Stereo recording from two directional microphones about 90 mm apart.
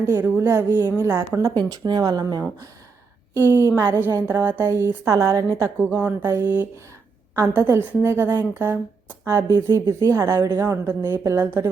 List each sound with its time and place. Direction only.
0.0 s a woman's voice: 25° right (ahead or behind)
1.5 s speech: 50° right (ahead or behind)
3.3 s a woman's voice: 25° right (ahead or behind)
8.5 s a woman's voice: 20° right (ahead or behind)
9.2 s speech: 35° right (ahead or behind)